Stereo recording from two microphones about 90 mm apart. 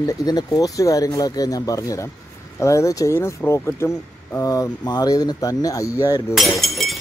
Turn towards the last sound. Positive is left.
turn(degrees=0)  # may be behind; listen again after turning